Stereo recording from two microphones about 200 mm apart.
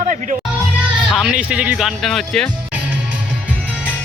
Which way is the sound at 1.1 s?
5° right (ahead or behind).